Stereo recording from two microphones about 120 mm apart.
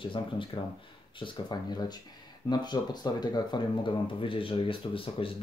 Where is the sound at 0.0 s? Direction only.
45° left (ahead or behind).